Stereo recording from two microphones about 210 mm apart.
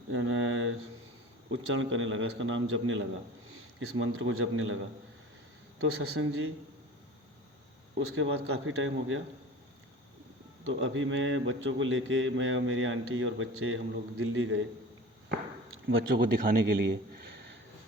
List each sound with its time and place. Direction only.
0.1 s a sound: 65° right (ahead or behind)
1.5 s a man's voice: 65° right (ahead or behind)
5.9 s speech: 75° right (ahead or behind)
7.9 s speech: 70° right (ahead or behind)
10.7 s a man's voice: 65° right (ahead or behind)
15.9 s speech: 65° right (ahead or behind)
16.3 s a man's voice: 45° right (ahead or behind)